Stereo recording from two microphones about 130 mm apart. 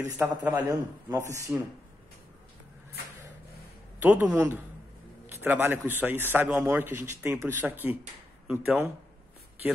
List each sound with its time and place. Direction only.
0.0 s a man's voice: 20° right (ahead or behind)
4.0 s a man's voice: 10° right (ahead or behind)